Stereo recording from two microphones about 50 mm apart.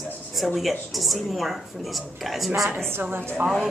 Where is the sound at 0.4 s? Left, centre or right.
Centre.